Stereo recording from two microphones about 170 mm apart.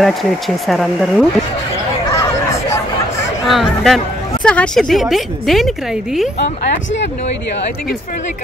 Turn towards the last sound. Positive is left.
turn(degrees=85)